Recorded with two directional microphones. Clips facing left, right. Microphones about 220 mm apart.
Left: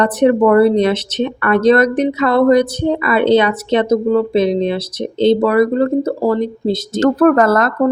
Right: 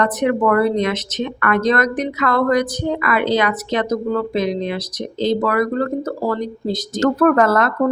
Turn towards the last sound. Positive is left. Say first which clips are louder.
# left 3 dB
turn(degrees=40)  # may be behind; listen again after turning